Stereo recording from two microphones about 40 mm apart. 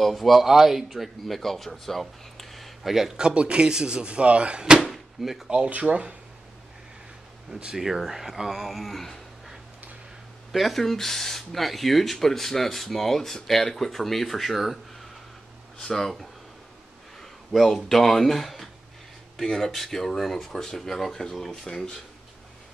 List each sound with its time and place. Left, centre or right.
0.0 s speech: centre
3.2 s speech: right
5.2 s speech: centre
5.7 s speech: right
7.5 s speech: centre
15.8 s speech: centre
17.6 s speech: centre